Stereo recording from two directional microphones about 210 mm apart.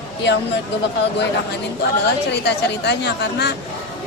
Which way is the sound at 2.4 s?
55° left (ahead or behind).